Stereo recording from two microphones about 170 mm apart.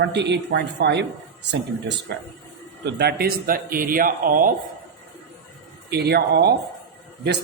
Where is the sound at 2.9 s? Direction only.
70° right (ahead or behind).